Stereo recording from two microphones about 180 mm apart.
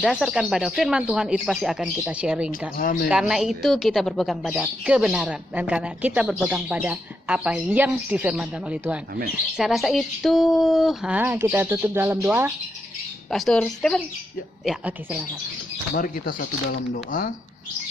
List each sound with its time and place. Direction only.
0.0 s speech: centre (ahead or behind)
2.7 s speech: 55° left (ahead or behind)
3.1 s speech: 5° right (ahead or behind)
13.3 s speech: centre (ahead or behind)
16.0 s speech: 55° left (ahead or behind)